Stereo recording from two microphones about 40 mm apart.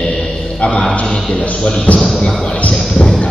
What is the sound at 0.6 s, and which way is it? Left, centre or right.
Music, left.